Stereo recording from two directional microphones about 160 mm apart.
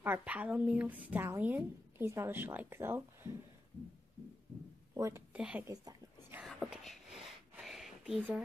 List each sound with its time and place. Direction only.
0.0 s a woman's voice: 10° right (ahead or behind)
4.9 s speech: 20° right (ahead or behind)
5.3 s a woman's voice: 10° right (ahead or behind)
5.7 s speech: 20° right (ahead or behind)
6.4 s a sound: centre (ahead or behind)